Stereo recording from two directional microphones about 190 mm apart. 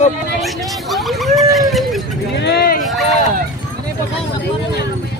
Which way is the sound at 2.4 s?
60° left (ahead or behind).